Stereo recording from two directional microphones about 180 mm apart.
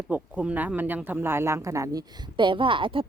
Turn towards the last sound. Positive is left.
turn(degrees=-30)  # may be behind; listen again after turning